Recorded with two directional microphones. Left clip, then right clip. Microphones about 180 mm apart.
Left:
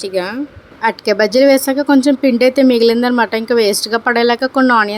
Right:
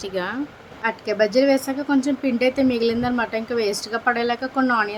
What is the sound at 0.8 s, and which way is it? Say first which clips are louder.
A woman's voice: left 7 dB; 50° left (ahead or behind).